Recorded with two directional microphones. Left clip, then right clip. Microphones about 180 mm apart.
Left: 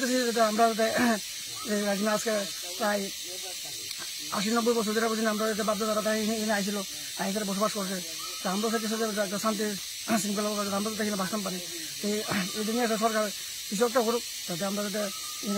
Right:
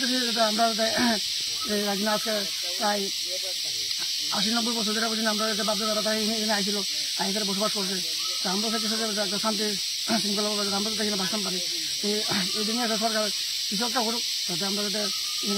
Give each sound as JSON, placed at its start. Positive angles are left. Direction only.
{"t": 0.0, "sound": "speech", "side_deg": 20}
{"t": 4.4, "sound": "speech", "side_deg": 25}